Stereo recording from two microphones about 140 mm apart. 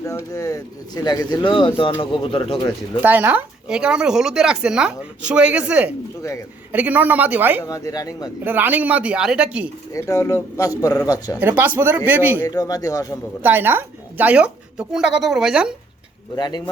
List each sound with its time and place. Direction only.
0.0 s speech: 20° left (ahead or behind)
3.0 s speech: 15° right (ahead or behind)
7.6 s speech: 25° left (ahead or behind)
8.4 s speech: 15° right (ahead or behind)
9.9 s speech: 20° left (ahead or behind)
11.3 s speech: 15° right (ahead or behind)
12.4 s speech: 25° left (ahead or behind)
13.4 s speech: 15° right (ahead or behind)
16.3 s speech: 30° left (ahead or behind)